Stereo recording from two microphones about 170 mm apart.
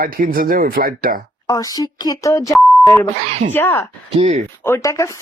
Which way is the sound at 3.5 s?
15° left (ahead or behind).